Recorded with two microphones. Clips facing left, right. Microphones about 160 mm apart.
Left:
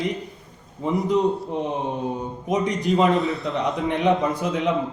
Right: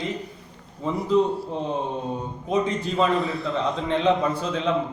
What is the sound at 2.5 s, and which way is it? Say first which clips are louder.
A man's voice: left 2 dB; 20° left (ahead or behind).